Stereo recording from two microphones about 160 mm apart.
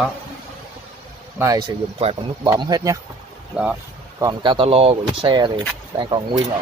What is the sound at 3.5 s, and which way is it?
Speech, 5° right (ahead or behind).